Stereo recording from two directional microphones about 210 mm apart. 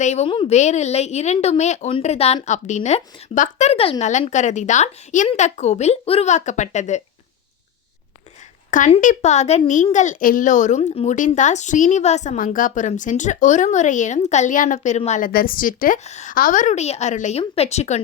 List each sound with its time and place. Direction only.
0.0 s speech: 30° left (ahead or behind)
8.7 s speech: 35° left (ahead or behind)